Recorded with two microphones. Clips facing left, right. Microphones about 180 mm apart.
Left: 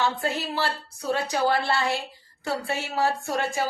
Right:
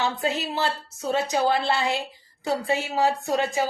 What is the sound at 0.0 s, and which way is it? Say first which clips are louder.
A woman's voice: right 1 dB; 20° right (ahead or behind).